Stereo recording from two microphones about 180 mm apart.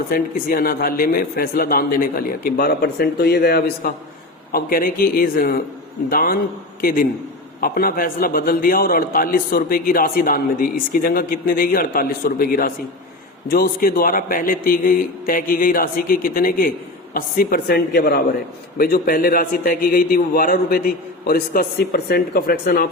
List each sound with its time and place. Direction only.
0.1 s a man's voice: 55° left (ahead or behind)
7.6 s a man's voice: 55° left (ahead or behind)